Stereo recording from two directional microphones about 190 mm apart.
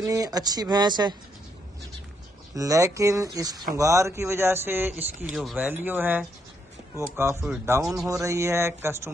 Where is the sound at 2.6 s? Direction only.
15° right (ahead or behind).